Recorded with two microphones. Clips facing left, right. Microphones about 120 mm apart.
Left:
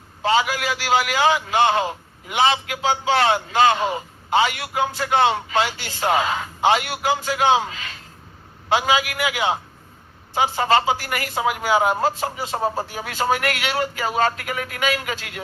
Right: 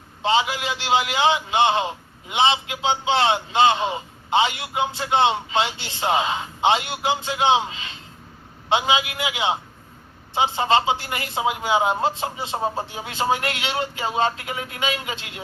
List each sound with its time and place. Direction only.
0.2 s a man's voice: 25° right (ahead or behind)